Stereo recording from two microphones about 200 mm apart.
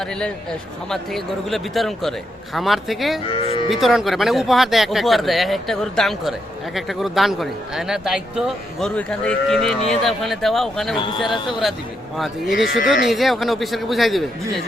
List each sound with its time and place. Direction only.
0.9 s speech: centre (ahead or behind)
10.9 s speech: 20° left (ahead or behind)
11.6 s speech: centre (ahead or behind)